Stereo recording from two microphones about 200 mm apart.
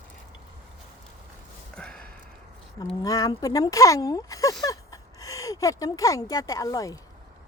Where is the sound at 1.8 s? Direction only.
5° left (ahead or behind).